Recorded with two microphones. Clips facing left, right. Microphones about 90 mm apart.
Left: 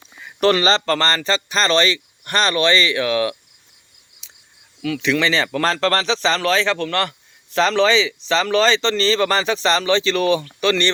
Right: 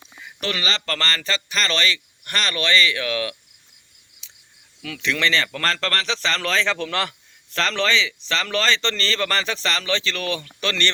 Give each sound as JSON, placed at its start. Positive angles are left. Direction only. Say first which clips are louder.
{"t": 0.3, "sound": "speech", "louder": "left 11 dB", "side_deg": 40}
{"t": 5.0, "sound": "speech", "louder": "left 3 dB", "side_deg": 10}
{"t": 6.4, "sound": "speech", "louder": "left 4 dB", "side_deg": 5}
{"t": 7.5, "sound": "speech", "louder": "left 6 dB", "side_deg": 15}